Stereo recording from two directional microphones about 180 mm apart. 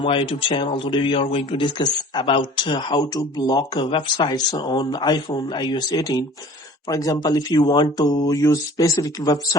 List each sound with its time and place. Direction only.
0.0 s speech: 30° left (ahead or behind)